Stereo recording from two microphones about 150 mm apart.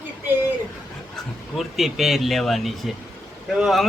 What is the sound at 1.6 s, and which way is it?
A man's voice, centre (ahead or behind).